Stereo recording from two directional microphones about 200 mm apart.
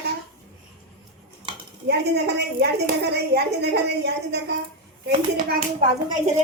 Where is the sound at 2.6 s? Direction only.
55° right (ahead or behind).